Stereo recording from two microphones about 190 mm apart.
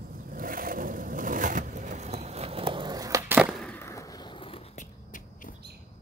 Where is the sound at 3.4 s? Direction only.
Centre (ahead or behind).